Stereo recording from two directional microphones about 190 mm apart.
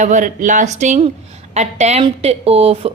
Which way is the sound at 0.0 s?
40° right (ahead or behind).